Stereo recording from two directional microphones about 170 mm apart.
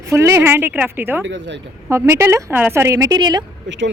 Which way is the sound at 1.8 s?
15° right (ahead or behind).